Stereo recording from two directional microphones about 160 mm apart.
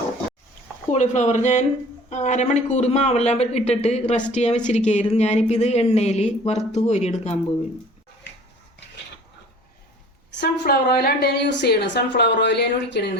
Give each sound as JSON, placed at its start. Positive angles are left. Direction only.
{"t": 0.9, "sound": "a man's voice", "side_deg": 50}
{"t": 10.4, "sound": "a woman's voice", "side_deg": 90}